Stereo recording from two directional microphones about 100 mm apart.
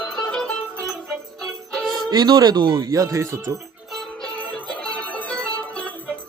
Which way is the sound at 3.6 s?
Centre (ahead or behind).